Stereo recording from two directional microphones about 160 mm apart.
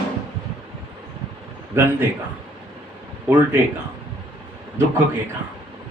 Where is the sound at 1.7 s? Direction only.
15° right (ahead or behind).